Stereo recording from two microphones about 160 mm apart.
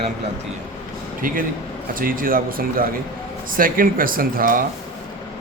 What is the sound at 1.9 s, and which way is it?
Speech, 60° right (ahead or behind).